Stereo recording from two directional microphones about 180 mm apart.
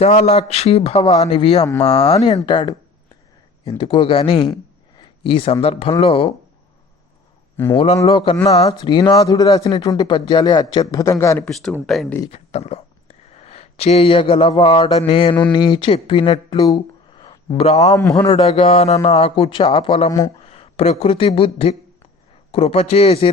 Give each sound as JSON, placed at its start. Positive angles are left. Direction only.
{"t": 0.0, "sound": "speech", "side_deg": 40}
{"t": 4.9, "sound": "a sound", "side_deg": 30}
{"t": 6.1, "sound": "speech", "side_deg": 30}
{"t": 7.5, "sound": "a man's voice", "side_deg": 15}
{"t": 8.0, "sound": "speech", "side_deg": 30}
{"t": 11.4, "sound": "speech", "side_deg": 0}
{"t": 12.3, "sound": "speech", "side_deg": 35}
{"t": 13.3, "sound": "mantra", "side_deg": 35}
{"t": 15.5, "sound": "speech", "side_deg": 25}
{"t": 17.2, "sound": "a sound", "side_deg": 30}
{"t": 18.1, "sound": "speech", "side_deg": 30}
{"t": 20.1, "sound": "speech", "side_deg": 15}
{"t": 20.4, "sound": "speech", "side_deg": 30}